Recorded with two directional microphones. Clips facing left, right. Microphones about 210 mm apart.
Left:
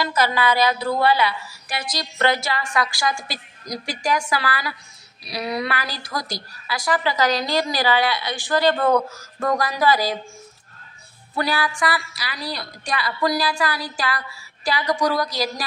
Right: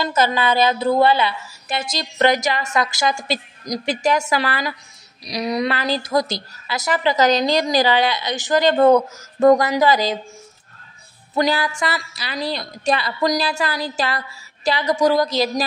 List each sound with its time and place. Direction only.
0.0 s a woman's voice: 25° right (ahead or behind)
11.3 s a woman's voice: 20° right (ahead or behind)